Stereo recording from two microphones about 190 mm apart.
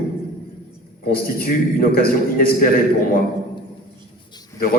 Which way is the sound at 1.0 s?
50° left (ahead or behind).